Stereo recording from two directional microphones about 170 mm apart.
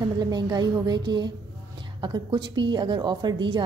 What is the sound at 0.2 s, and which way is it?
A woman's voice, 25° right (ahead or behind).